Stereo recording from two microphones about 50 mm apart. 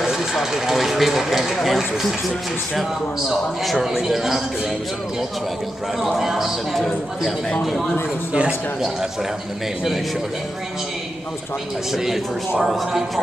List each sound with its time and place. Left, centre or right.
0.0 s speech: centre
3.8 s a man's voice: centre
6.0 s speech: centre
8.3 s speech: right
12.0 s speech: centre